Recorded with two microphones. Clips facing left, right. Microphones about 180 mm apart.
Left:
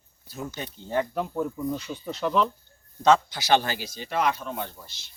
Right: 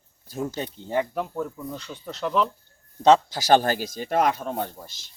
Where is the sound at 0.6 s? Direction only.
15° right (ahead or behind).